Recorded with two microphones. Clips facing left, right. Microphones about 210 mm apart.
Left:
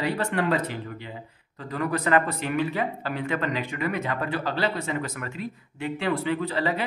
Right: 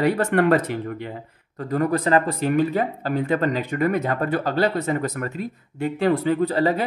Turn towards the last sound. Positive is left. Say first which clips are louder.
# right 6 dB
turn(degrees=-40)  # may be behind; listen again after turning